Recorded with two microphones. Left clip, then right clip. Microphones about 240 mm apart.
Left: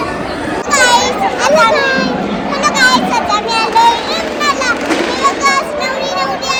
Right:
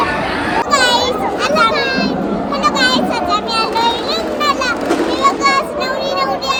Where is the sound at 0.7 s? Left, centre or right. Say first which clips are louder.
Left 4 dB; centre.